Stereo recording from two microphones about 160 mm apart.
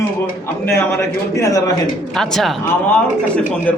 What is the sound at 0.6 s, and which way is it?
A man's voice, 15° left (ahead or behind).